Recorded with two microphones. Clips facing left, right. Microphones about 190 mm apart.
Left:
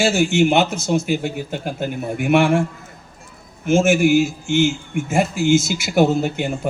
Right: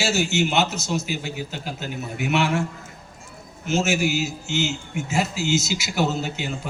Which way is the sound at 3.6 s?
55° left (ahead or behind).